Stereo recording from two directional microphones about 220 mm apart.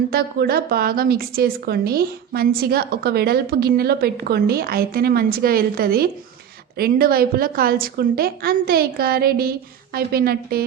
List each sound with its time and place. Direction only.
0.1 s a woman's voice: 45° right (ahead or behind)